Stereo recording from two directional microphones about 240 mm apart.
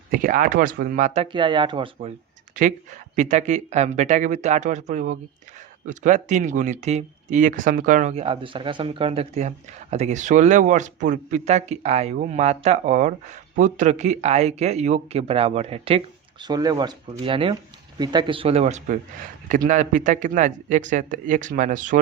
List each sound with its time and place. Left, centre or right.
0.1 s speech: right